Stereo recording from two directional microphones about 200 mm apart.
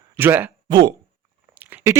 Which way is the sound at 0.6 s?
20° right (ahead or behind).